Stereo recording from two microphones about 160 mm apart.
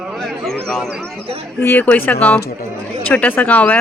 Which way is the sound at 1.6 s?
15° left (ahead or behind).